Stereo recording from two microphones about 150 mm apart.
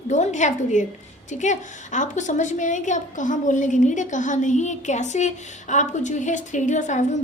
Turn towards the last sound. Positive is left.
turn(degrees=55)  # may be behind; listen again after turning